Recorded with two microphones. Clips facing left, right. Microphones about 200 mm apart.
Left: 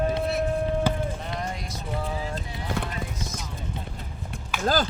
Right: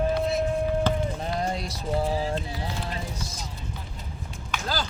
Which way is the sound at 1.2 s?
35° right (ahead or behind).